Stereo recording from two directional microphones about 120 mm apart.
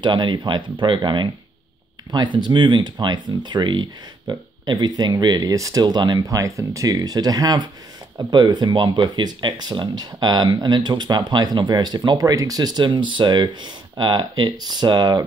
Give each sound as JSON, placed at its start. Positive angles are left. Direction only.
{"t": 0.0, "sound": "speech", "side_deg": -40}